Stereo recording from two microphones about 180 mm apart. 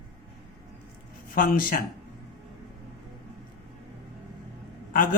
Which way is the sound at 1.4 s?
50° left (ahead or behind).